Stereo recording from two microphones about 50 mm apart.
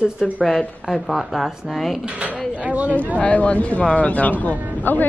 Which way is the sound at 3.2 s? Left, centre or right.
Left.